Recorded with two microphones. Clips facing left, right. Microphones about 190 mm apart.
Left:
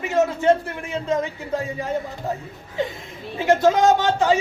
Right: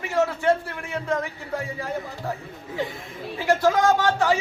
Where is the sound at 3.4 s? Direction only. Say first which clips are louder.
Left 3 dB; 20° left (ahead or behind).